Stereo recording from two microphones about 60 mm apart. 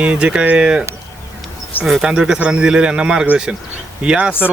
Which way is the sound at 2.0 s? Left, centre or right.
Centre.